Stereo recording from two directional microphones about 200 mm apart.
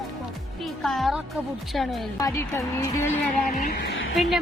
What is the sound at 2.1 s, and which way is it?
A woman's voice, 15° left (ahead or behind).